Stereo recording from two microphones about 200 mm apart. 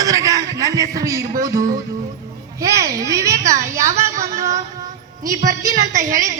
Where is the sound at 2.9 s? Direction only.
15° right (ahead or behind).